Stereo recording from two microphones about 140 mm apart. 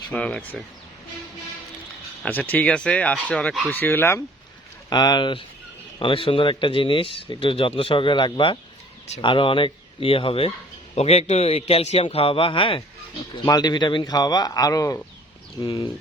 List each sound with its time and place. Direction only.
0.1 s speech: 10° left (ahead or behind)
2.2 s speech: 10° left (ahead or behind)
4.9 s a man's voice: 30° left (ahead or behind)